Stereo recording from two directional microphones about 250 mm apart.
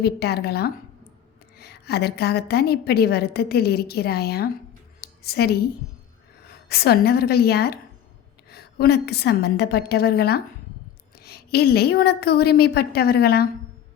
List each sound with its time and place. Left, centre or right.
0.0 s a woman's voice: left
4.9 s a sound: left
6.7 s a woman's voice: left